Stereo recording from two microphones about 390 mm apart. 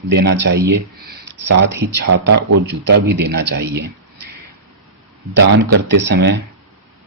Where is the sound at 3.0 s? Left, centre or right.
Right.